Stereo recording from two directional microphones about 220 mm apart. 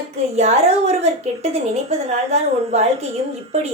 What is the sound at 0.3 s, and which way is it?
A woman's voice, 30° right (ahead or behind).